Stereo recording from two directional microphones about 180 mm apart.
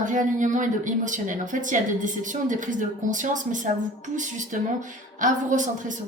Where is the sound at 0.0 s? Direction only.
45° right (ahead or behind).